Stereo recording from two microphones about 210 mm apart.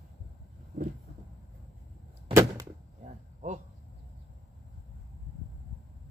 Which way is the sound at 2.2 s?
15° right (ahead or behind).